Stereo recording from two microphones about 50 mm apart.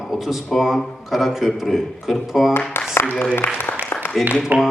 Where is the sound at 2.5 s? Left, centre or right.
Left.